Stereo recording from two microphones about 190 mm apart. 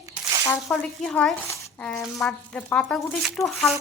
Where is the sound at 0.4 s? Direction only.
10° left (ahead or behind).